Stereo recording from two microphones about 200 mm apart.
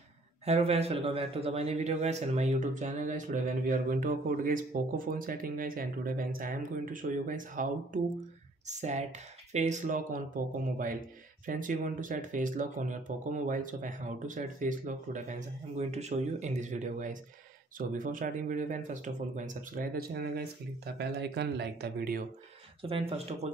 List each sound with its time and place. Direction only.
0.5 s a man's voice: 30° right (ahead or behind); by 22.2 s 50° right (ahead or behind)
22.8 s speech: 25° right (ahead or behind)